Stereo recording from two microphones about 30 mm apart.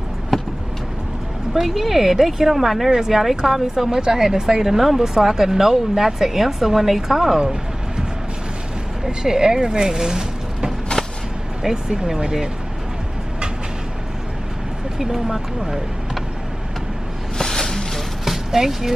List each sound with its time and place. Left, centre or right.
0.3 s vehicle: centre
1.8 s speech: centre
2.9 s speech: centre
9.0 s speech: right
15.0 s speech: centre
17.4 s a sound: centre
18.2 s a sound: centre